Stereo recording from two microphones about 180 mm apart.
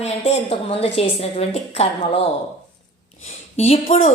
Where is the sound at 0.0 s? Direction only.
35° left (ahead or behind).